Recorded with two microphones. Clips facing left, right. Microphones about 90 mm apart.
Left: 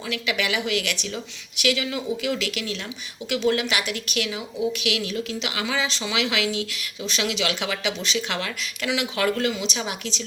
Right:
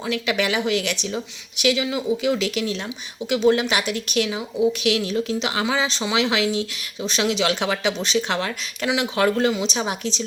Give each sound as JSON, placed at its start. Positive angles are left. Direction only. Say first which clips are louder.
{"t": 0.1, "sound": "a woman's voice", "louder": "right 4 dB", "side_deg": -35}